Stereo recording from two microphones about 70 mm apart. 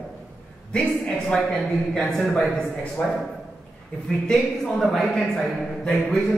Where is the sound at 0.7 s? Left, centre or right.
Centre.